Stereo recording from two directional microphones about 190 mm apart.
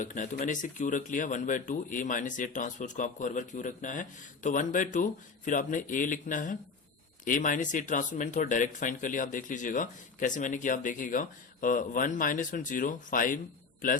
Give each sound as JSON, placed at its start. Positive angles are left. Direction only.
{"t": 0.0, "sound": "speech", "side_deg": 40}